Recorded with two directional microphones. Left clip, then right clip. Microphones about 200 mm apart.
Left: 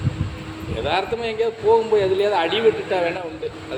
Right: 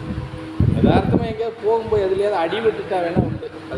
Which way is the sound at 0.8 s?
15° right (ahead or behind).